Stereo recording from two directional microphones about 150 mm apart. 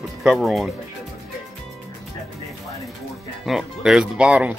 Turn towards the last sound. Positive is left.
turn(degrees=-10)  # may be behind; listen again after turning